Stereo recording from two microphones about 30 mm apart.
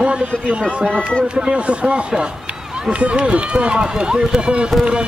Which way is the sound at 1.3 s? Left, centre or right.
Right.